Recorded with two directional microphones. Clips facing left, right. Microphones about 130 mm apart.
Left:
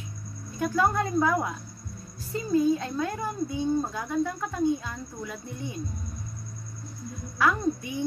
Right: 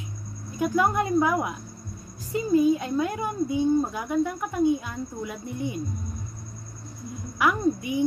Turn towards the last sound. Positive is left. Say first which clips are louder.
# right 3 dB
turn(degrees=-15)  # may be behind; listen again after turning